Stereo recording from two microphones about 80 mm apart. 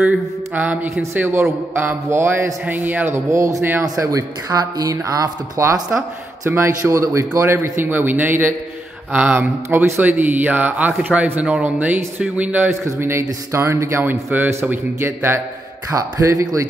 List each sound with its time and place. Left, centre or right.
0.0 s a man's voice: centre
3.1 s a man's voice: right; by 12.7 s centre
12.8 s a man's voice: right
15.9 s speech: right